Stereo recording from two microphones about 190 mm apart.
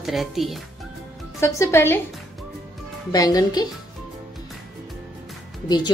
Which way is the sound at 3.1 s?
20° left (ahead or behind).